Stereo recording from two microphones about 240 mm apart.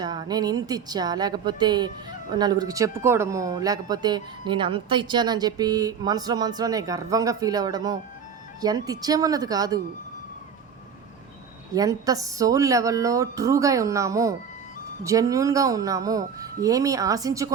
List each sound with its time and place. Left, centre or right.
0.0 s speech: centre
11.7 s speech: centre